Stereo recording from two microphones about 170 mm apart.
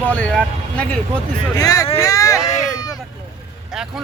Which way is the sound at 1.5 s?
20° left (ahead or behind).